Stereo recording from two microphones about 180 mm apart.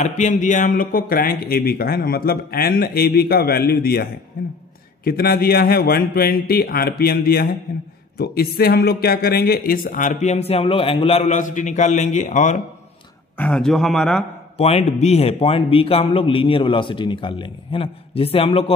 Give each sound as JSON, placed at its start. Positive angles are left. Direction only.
{"t": 0.0, "sound": "a man's voice", "side_deg": 45}
{"t": 13.4, "sound": "a man's voice", "side_deg": 5}
{"t": 14.6, "sound": "a man's voice", "side_deg": 35}